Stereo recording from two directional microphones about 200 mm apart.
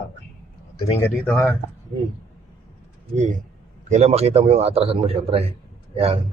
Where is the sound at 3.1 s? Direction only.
35° right (ahead or behind).